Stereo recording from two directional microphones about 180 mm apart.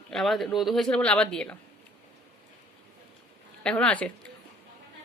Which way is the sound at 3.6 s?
5° left (ahead or behind).